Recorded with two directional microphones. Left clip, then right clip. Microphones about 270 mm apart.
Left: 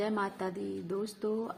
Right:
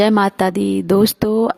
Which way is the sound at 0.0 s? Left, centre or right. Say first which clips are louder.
Right 19 dB; right.